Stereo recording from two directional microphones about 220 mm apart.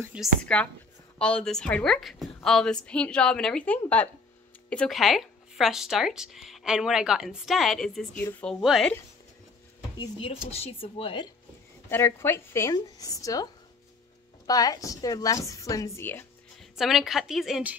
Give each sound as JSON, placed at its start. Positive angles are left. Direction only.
{"t": 0.0, "sound": "speech", "side_deg": -5}
{"t": 9.9, "sound": "speech", "side_deg": 25}
{"t": 11.9, "sound": "a woman's voice", "side_deg": 10}
{"t": 16.7, "sound": "speech", "side_deg": 0}